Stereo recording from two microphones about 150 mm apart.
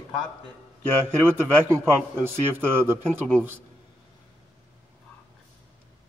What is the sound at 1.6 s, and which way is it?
Speech, 15° right (ahead or behind).